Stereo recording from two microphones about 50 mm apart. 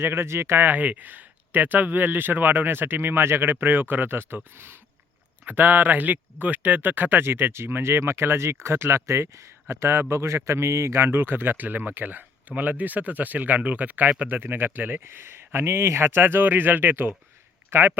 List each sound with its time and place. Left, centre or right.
0.0 s speech: right
0.7 s a man's voice: right
5.5 s a man's voice: right
15.0 s a man's voice: right